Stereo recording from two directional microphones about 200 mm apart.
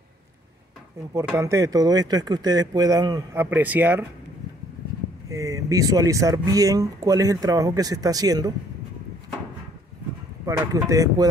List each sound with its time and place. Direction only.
1.1 s speech: 15° right (ahead or behind)
5.3 s speech: 15° right (ahead or behind)
10.4 s speech: 15° right (ahead or behind)